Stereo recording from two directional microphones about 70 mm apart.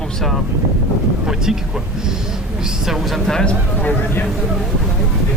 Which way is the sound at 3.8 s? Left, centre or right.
Left.